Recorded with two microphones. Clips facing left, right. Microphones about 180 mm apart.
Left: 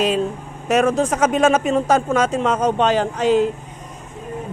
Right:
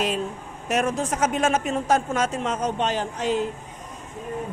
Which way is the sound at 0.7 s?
90° left.